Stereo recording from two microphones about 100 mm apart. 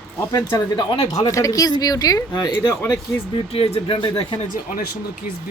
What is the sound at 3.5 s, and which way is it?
Speech, 65° left (ahead or behind).